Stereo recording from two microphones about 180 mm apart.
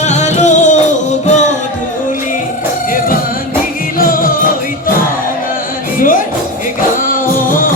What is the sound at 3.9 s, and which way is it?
Music, 50° left (ahead or behind).